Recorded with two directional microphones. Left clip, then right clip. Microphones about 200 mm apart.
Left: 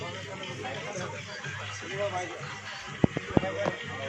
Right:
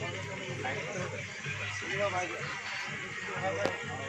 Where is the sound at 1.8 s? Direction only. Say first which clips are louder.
Even; 45° left (ahead or behind).